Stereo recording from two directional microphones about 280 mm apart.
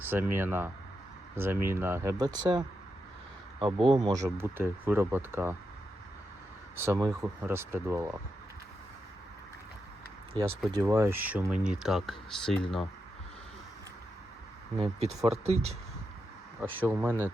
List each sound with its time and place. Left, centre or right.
0.0 s speech: centre
6.7 s speech: centre
10.3 s speech: centre
14.8 s speech: right
16.6 s speech: centre